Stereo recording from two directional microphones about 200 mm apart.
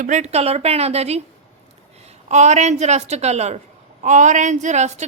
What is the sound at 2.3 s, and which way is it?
A woman's voice, 35° right (ahead or behind).